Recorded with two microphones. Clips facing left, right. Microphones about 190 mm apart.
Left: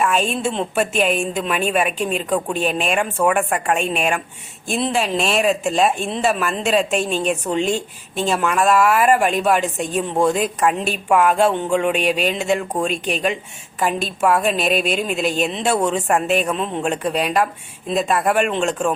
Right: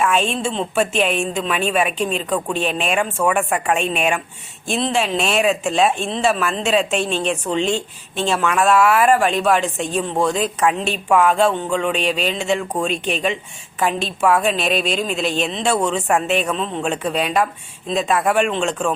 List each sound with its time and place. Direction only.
0.0 s a woman's voice: centre (ahead or behind)
11.9 s speech: 50° left (ahead or behind)
12.2 s speech: 5° left (ahead or behind)
14.7 s speech: 50° left (ahead or behind)
14.9 s a woman's voice: 10° left (ahead or behind)
16.5 s a woman's voice: 10° left (ahead or behind)